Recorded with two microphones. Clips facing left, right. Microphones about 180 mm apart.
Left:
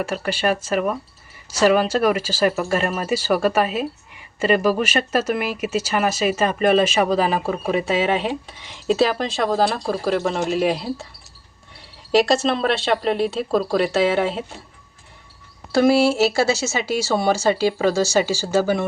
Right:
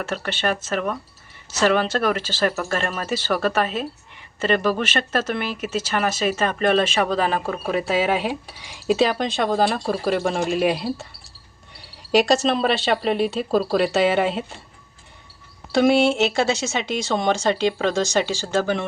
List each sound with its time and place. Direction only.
0.0 s speech: 10° left (ahead or behind)
15.7 s speech: centre (ahead or behind)